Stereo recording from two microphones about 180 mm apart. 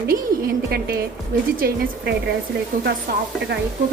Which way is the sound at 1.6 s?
65° right (ahead or behind).